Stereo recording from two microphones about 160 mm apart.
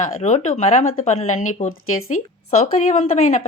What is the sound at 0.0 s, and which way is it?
Speech, 45° left (ahead or behind).